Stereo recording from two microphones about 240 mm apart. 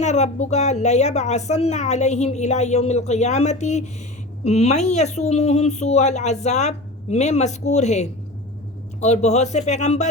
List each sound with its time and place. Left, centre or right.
0.0 s speech: left